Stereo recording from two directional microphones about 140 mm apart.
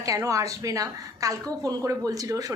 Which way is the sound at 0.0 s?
25° right (ahead or behind).